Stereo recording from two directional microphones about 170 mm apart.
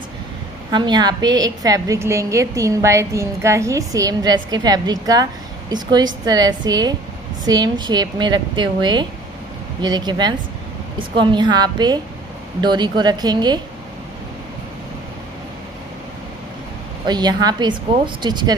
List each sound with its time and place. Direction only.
0.7 s a woman's voice: 25° right (ahead or behind)
17.0 s a woman's voice: 25° right (ahead or behind)